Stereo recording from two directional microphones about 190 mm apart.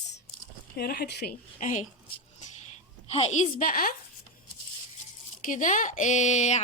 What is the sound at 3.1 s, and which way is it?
Speech, 35° left (ahead or behind).